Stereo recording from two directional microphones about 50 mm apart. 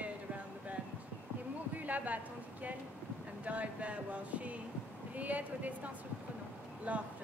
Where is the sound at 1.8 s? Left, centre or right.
Right.